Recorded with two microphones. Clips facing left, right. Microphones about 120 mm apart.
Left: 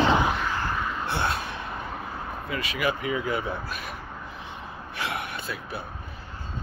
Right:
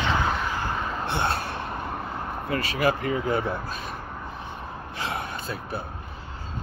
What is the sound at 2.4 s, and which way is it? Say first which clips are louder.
Speech: right 4 dB; 40° right (ahead or behind).